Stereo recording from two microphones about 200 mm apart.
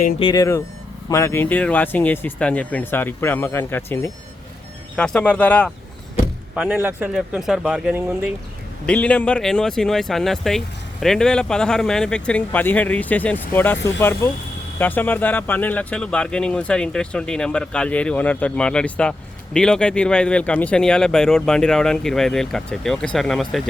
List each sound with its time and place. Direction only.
0.2 s speech: 20° left (ahead or behind)
6.6 s speech: 10° right (ahead or behind)
8.9 s speech: 5° left (ahead or behind)